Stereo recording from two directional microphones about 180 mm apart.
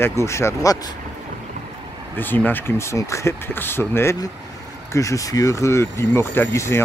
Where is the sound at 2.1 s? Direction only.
10° left (ahead or behind).